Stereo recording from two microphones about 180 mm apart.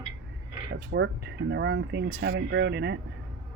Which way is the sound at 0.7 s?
75° right (ahead or behind).